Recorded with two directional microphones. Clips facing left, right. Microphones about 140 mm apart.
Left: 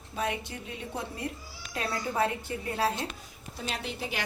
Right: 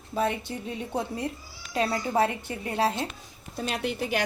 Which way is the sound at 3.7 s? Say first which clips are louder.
Right 7 dB; 60° right (ahead or behind).